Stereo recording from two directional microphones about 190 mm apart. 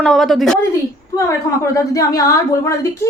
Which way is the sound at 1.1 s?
15° left (ahead or behind).